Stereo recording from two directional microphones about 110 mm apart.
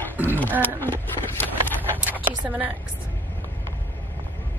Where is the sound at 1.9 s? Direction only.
15° right (ahead or behind).